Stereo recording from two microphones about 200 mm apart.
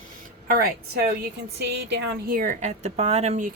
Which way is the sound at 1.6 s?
60° right (ahead or behind).